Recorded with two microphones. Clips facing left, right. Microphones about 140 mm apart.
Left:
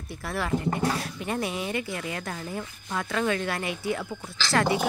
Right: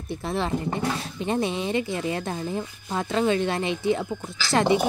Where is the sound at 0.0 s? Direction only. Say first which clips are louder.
Right 4 dB; 25° right (ahead or behind).